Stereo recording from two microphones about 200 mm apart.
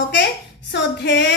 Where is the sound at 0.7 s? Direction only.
60° left (ahead or behind).